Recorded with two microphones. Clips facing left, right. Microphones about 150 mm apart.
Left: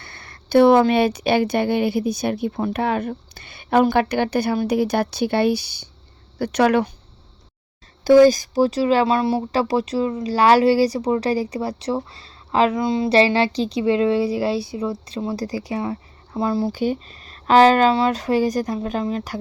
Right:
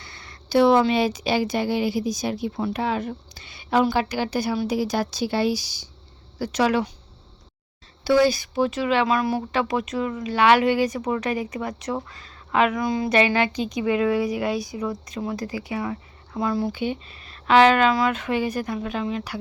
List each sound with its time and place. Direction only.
0.0 s a woman's voice: 55° left (ahead or behind)
8.0 s a woman's voice: 45° left (ahead or behind)